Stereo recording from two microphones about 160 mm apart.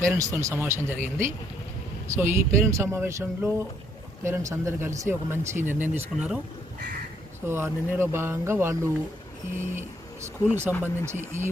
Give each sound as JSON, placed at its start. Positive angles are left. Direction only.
{"t": 0.1, "sound": "speech", "side_deg": -20}
{"t": 7.4, "sound": "speech", "side_deg": -15}